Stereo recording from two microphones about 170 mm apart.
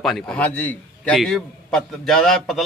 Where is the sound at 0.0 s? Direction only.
5° left (ahead or behind).